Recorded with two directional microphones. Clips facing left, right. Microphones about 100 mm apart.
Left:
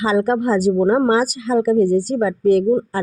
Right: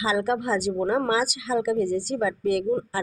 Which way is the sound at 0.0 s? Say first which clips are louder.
Left 7 dB; 45° left (ahead or behind).